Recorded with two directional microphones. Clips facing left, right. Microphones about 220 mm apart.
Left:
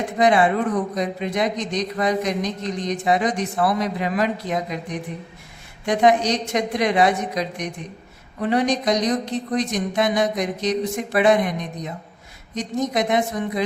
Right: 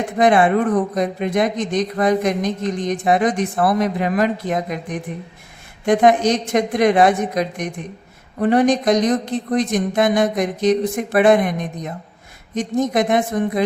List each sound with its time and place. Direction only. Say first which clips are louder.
0.2 s speech: right 3 dB; 50° right (ahead or behind)